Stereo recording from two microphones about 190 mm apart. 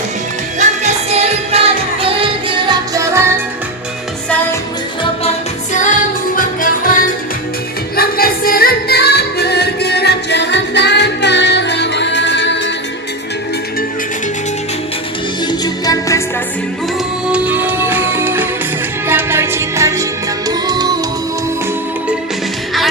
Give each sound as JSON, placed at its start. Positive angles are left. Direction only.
{"t": 0.6, "sound": "music", "side_deg": -35}
{"t": 2.9, "sound": "music", "side_deg": -15}
{"t": 5.7, "sound": "music", "side_deg": 40}
{"t": 15.4, "sound": "music", "side_deg": 20}
{"t": 17.2, "sound": "music", "side_deg": -5}